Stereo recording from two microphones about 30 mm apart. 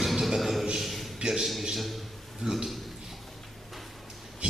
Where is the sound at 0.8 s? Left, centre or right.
Centre.